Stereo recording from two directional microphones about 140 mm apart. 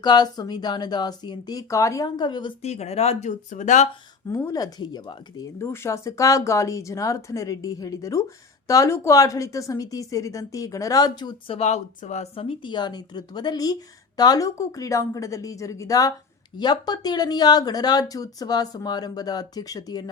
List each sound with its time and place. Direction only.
0.0 s speech: 30° left (ahead or behind)
2.6 s speech: 50° left (ahead or behind)
4.3 s speech: 20° left (ahead or behind)
11.5 s speech: 50° left (ahead or behind); by 20.1 s 25° left (ahead or behind)